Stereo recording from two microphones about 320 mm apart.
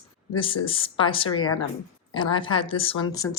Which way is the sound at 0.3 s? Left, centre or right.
Centre.